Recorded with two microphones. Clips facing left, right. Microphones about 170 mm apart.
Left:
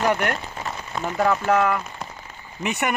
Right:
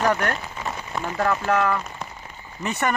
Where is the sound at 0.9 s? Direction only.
10° left (ahead or behind).